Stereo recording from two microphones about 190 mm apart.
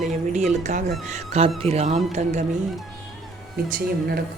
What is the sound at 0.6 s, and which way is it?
A woman's voice, 40° right (ahead or behind).